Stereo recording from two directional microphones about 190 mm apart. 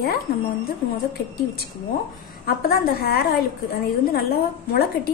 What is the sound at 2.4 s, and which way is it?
A woman's voice, 55° left (ahead or behind).